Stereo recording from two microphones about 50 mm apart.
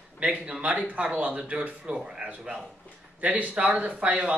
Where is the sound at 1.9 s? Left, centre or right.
Centre.